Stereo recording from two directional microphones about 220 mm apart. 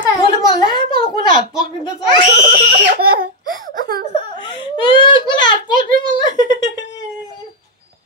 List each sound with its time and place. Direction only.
0.0 s a sound: 20° left (ahead or behind)
2.3 s screaming: 45° right (ahead or behind)
3.9 s whimper: 20° left (ahead or behind)